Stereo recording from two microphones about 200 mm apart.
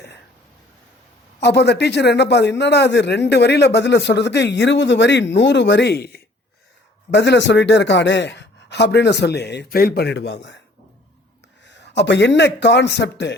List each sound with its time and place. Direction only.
1.4 s a man's voice: 60° left (ahead or behind)
11.6 s speech: 60° left (ahead or behind)